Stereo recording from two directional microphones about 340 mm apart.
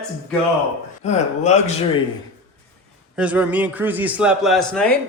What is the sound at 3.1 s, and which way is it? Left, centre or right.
A man's voice, centre.